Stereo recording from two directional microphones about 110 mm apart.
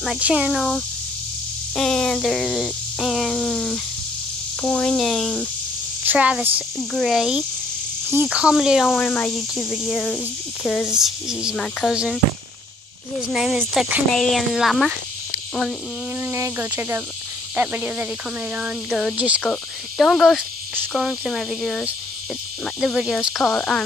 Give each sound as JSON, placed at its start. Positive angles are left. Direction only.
{"t": 0.2, "sound": "speech", "side_deg": -10}
{"t": 6.0, "sound": "speech", "side_deg": -10}
{"t": 6.8, "sound": "speech", "side_deg": 5}
{"t": 9.6, "sound": "speech", "side_deg": 0}
{"t": 11.9, "sound": "speech", "side_deg": -5}
{"t": 13.3, "sound": "speech", "side_deg": 0}
{"t": 16.2, "sound": "speech", "side_deg": -25}
{"t": 19.1, "sound": "cricket", "side_deg": -10}
{"t": 19.4, "sound": "speech", "side_deg": 5}